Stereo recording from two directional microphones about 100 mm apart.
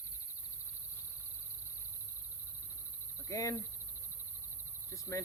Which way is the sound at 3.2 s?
35° left (ahead or behind).